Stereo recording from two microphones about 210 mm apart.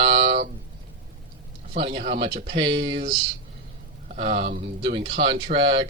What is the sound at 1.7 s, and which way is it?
Speech, 30° right (ahead or behind).